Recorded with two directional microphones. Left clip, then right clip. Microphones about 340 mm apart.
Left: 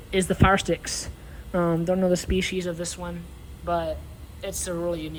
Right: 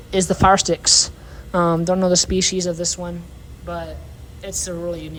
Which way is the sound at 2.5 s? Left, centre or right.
Centre.